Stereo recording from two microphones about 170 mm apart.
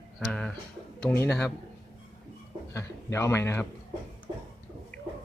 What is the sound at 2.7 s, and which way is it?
Speech, 15° left (ahead or behind).